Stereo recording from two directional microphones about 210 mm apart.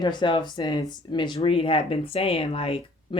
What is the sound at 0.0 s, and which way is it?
Speech, 20° left (ahead or behind).